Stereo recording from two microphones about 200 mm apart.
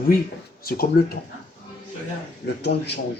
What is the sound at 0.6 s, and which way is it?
Speech, 50° left (ahead or behind).